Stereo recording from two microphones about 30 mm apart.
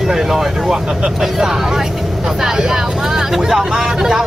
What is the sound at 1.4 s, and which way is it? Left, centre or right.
Speech, centre.